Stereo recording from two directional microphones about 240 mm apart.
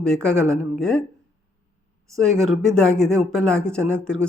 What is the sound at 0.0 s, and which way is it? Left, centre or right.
Speech, centre.